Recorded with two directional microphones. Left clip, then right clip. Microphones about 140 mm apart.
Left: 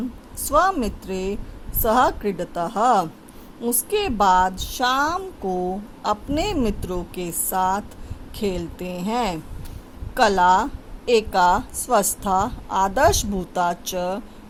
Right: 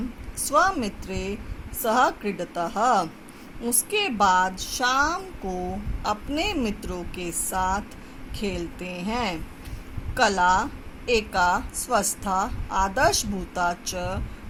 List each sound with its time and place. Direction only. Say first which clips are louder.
0.4 s a woman's voice: left 3 dB; 55° left (ahead or behind); by 14.2 s 75° left (ahead or behind)